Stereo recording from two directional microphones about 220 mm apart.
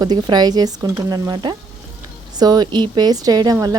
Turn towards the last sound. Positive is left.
turn(degrees=-15)  # may be behind; listen again after turning